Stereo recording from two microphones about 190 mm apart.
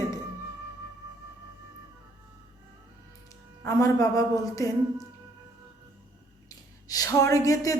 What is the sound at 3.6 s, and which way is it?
Speech, 15° left (ahead or behind).